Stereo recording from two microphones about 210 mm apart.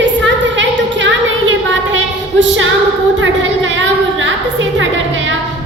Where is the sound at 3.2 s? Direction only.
65° right (ahead or behind).